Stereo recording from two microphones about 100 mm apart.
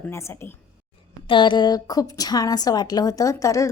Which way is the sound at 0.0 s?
30° left (ahead or behind).